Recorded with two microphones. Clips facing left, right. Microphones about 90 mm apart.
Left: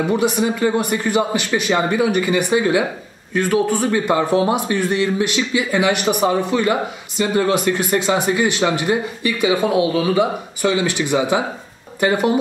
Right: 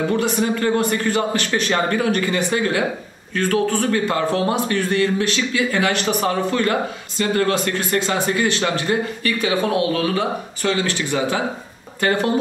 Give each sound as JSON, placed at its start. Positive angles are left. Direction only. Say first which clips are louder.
{"t": 0.1, "sound": "a man's voice", "louder": "left 2 dB", "side_deg": 10}